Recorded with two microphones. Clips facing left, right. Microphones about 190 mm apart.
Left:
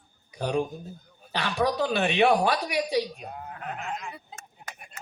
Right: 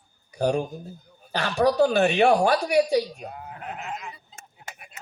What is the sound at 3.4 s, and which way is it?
Goat, centre (ahead or behind).